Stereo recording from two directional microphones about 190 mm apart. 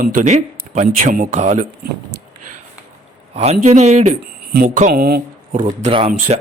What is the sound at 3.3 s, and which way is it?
Speech, 35° right (ahead or behind).